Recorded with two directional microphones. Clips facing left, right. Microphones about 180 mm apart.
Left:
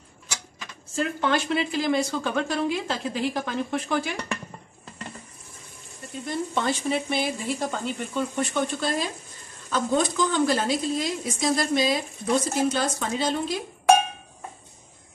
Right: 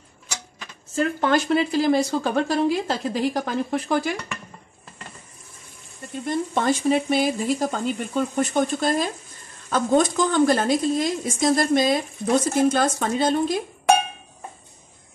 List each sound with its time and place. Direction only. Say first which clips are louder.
0.9 s speech: right 4 dB; 40° right (ahead or behind)
6.2 s a woman's voice: right 4 dB; 45° right (ahead or behind)